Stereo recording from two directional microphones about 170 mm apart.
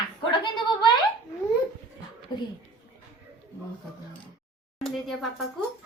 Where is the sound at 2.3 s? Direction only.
25° left (ahead or behind).